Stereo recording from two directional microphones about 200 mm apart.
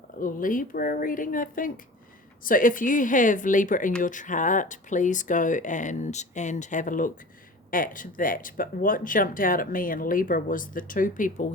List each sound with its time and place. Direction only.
0.2 s speech: 45° left (ahead or behind)